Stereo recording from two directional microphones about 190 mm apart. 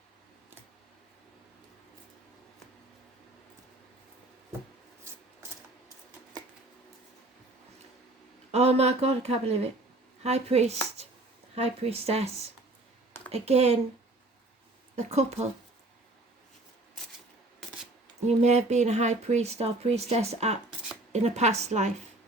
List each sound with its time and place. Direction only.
8.5 s speech: 35° right (ahead or behind)
13.3 s speech: 35° right (ahead or behind)
14.9 s speech: 35° right (ahead or behind)
18.3 s speech: 35° right (ahead or behind)